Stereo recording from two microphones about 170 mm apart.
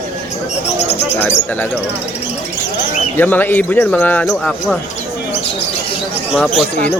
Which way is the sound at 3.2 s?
10° left (ahead or behind).